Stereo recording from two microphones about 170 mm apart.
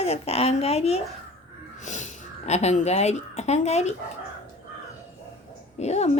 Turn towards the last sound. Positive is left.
turn(degrees=40)  # may be behind; listen again after turning